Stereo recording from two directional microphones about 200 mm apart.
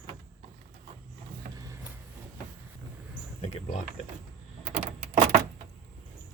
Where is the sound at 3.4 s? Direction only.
35° left (ahead or behind).